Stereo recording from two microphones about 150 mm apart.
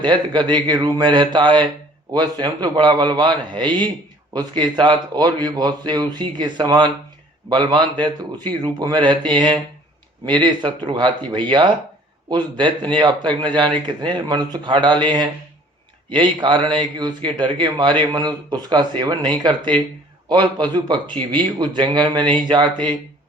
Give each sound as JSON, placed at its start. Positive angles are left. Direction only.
{"t": 0.0, "sound": "a man's voice", "side_deg": -30}